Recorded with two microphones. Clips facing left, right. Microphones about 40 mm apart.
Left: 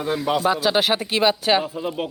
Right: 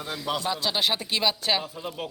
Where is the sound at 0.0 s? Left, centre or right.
Left.